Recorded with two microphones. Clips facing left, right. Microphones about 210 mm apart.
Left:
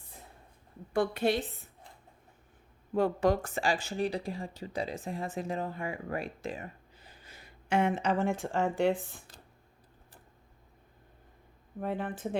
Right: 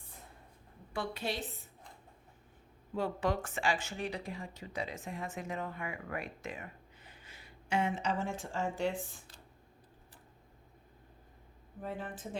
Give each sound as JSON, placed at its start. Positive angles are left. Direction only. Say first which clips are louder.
{"t": 0.9, "sound": "a woman's voice", "louder": "left 9 dB", "side_deg": 50}
{"t": 2.9, "sound": "speech", "louder": "left 7 dB", "side_deg": 45}
{"t": 11.8, "sound": "speech", "louder": "left 7 dB", "side_deg": 65}